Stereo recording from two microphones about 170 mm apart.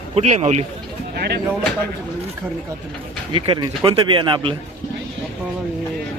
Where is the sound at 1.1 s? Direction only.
70° right (ahead or behind).